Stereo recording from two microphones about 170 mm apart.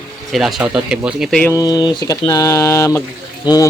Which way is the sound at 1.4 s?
20° left (ahead or behind).